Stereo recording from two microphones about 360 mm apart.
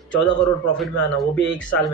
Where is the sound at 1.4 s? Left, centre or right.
Left.